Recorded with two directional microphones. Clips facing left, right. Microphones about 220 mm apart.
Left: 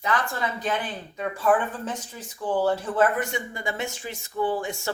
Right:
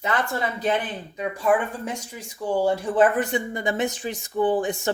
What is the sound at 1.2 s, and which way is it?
A woman's voice, 15° right (ahead or behind).